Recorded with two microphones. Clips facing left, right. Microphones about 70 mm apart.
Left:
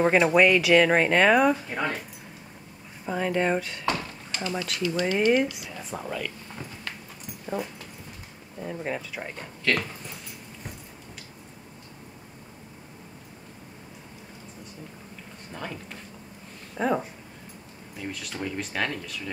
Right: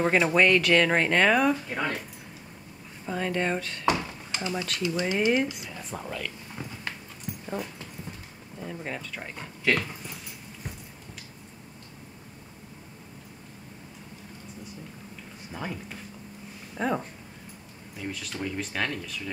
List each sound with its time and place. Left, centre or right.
0.0 s speech: centre
3.1 s speech: centre
3.8 s a sound: centre
5.0 s speech: centre
5.4 s speech: centre
8.5 s speech: centre
15.5 s speech: centre
16.7 s speech: centre